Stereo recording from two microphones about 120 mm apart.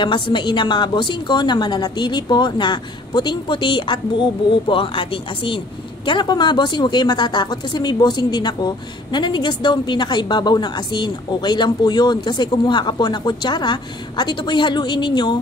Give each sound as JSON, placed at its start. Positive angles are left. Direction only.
{"t": 0.0, "sound": "a woman's voice", "side_deg": 40}